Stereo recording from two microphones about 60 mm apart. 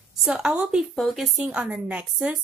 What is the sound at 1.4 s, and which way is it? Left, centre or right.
Speech, right.